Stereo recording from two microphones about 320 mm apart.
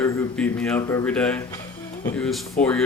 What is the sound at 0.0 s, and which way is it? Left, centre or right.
Speech, centre.